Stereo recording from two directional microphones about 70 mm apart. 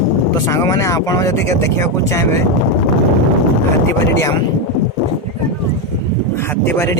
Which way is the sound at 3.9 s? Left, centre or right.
Left.